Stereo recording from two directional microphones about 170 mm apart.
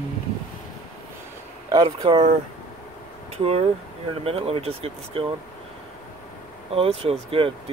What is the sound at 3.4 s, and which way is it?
Speech, 35° right (ahead or behind).